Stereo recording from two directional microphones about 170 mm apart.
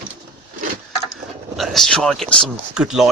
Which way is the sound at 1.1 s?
Centre (ahead or behind).